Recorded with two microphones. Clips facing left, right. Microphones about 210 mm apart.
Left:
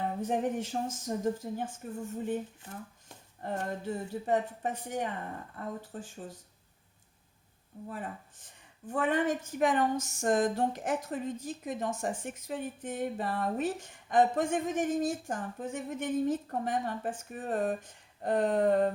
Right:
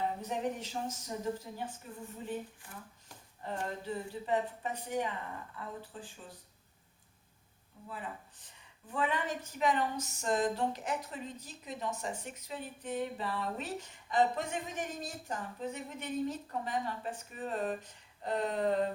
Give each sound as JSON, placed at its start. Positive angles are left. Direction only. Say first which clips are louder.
{"t": 0.2, "sound": "a woman's voice", "louder": "left 5 dB", "side_deg": 50}
{"t": 2.6, "sound": "speech", "louder": "left 5 dB", "side_deg": 25}
{"t": 3.4, "sound": "a woman's voice", "louder": "left 4 dB", "side_deg": 50}
{"t": 7.9, "sound": "a woman's voice", "louder": "left 3 dB", "side_deg": 45}